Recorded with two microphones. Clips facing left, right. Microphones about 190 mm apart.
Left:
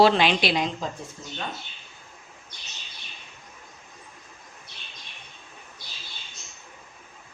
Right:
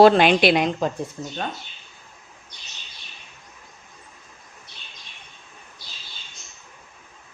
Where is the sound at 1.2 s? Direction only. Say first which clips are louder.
Right 8 dB; 45° right (ahead or behind).